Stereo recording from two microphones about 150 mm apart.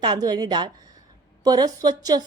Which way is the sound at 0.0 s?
30° right (ahead or behind).